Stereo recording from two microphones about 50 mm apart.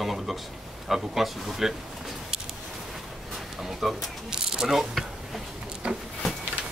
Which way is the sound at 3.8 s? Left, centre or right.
Centre.